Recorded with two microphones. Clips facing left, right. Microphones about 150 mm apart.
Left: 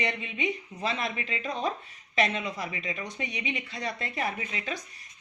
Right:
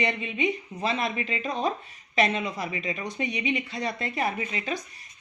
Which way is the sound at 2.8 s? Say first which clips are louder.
Right 5 dB; 30° right (ahead or behind).